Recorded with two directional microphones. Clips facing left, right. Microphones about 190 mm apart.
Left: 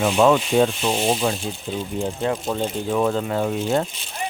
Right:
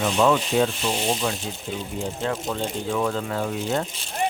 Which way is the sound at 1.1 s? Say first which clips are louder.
Left 4 dB; 25° left (ahead or behind).